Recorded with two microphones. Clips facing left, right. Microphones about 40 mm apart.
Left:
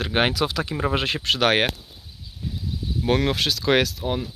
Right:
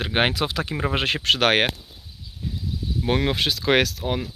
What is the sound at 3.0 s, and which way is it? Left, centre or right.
Speech, centre.